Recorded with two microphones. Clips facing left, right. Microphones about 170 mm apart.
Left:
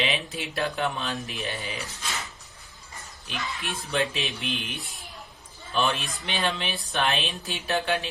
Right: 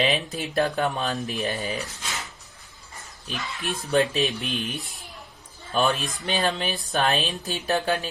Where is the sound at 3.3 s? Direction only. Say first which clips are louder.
Right 2 dB; 40° right (ahead or behind).